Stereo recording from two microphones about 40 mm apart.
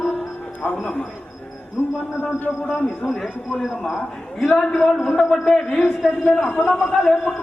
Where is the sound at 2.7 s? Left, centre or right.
Left.